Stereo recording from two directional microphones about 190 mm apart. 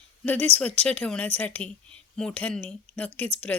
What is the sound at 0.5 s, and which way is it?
Speech, 35° right (ahead or behind).